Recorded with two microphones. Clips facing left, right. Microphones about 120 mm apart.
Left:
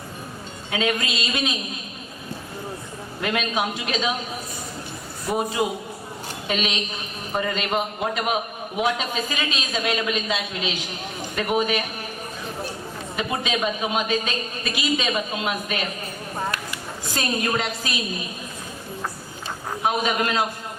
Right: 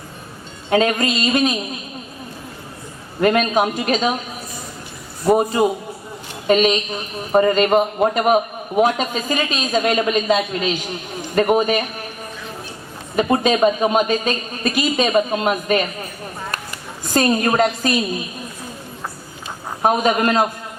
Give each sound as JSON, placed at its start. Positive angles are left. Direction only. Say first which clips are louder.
{"t": 0.7, "sound": "a man's voice", "louder": "right 8 dB", "side_deg": -45}
{"t": 3.2, "sound": "a man's voice", "louder": "right 9 dB", "side_deg": -45}
{"t": 5.2, "sound": "a man's voice", "louder": "right 8 dB", "side_deg": -45}
{"t": 13.1, "sound": "a man's voice", "louder": "right 10 dB", "side_deg": -45}
{"t": 17.1, "sound": "a man's voice", "louder": "right 8 dB", "side_deg": -45}
{"t": 19.8, "sound": "a man's voice", "louder": "right 7 dB", "side_deg": -45}